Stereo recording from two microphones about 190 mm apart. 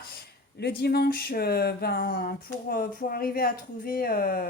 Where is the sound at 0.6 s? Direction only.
55° left (ahead or behind).